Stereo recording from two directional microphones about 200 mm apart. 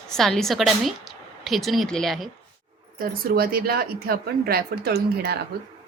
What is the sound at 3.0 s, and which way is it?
A woman's voice, 45° right (ahead or behind).